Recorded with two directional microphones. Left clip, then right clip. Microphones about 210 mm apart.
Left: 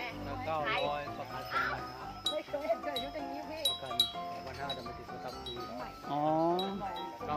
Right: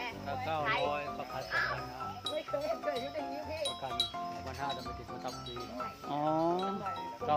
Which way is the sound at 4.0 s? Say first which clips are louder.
Left 4 dB; 55° left (ahead or behind).